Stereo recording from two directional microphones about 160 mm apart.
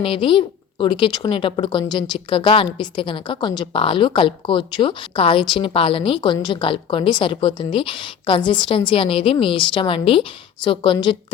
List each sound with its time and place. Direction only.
0.0 s a woman's voice: 30° left (ahead or behind)